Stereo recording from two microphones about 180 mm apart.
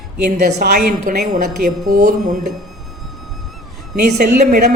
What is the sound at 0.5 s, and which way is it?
Speech, 60° right (ahead or behind).